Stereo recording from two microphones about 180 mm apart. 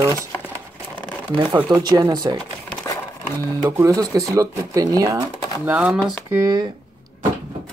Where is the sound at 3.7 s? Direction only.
20° right (ahead or behind).